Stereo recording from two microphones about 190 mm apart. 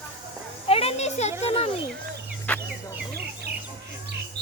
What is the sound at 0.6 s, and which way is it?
Children playing, 30° left (ahead or behind).